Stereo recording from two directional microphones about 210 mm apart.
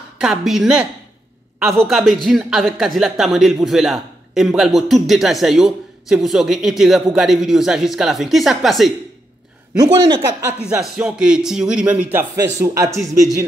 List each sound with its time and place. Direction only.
0.2 s speech: centre (ahead or behind)
1.9 s speech: centre (ahead or behind)
9.8 s speech: 20° right (ahead or behind)
10.6 s speech: 5° right (ahead or behind)